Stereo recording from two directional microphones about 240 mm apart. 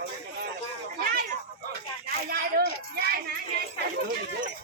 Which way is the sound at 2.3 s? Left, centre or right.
Right.